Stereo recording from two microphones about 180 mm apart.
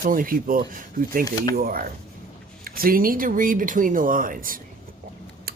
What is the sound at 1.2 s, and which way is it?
Speech, 20° left (ahead or behind).